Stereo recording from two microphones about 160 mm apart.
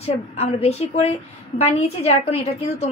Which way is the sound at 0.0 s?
40° left (ahead or behind).